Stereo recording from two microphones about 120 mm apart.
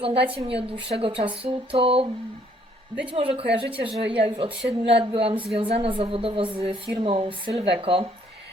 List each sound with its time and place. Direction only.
0.0 s speech: 50° right (ahead or behind)
3.1 s speech: 50° right (ahead or behind)